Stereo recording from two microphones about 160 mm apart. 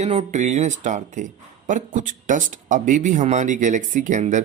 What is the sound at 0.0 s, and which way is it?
Speech, 45° right (ahead or behind).